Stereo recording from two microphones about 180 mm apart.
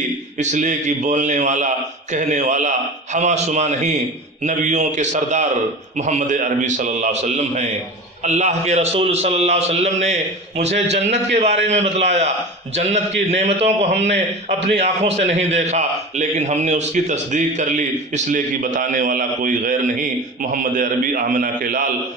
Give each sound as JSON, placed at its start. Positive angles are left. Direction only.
{"t": 0.4, "sound": "a man's voice", "side_deg": -40}